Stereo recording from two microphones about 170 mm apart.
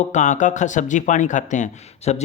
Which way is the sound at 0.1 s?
45° left (ahead or behind).